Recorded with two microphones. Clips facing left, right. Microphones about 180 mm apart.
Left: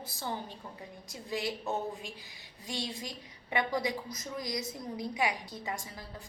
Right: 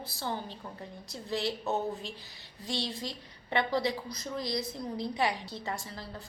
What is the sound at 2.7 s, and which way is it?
Speech, 30° right (ahead or behind).